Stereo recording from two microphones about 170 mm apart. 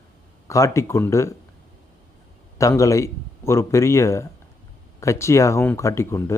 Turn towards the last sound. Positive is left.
turn(degrees=15)  # may be behind; listen again after turning